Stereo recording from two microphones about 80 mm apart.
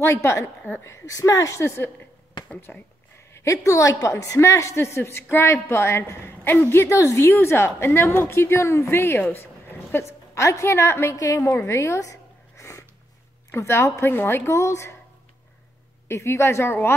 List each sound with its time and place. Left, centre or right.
0.0 s a woman's voice: left
2.7 s speech: centre
3.3 s a woman's voice: left
9.2 s a sound: left
9.9 s a woman's voice: left
16.1 s a woman's voice: left